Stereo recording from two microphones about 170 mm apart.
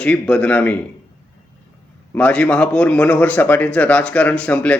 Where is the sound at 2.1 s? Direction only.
5° left (ahead or behind).